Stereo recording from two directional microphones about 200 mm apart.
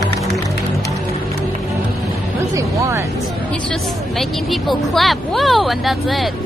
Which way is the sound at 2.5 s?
15° right (ahead or behind).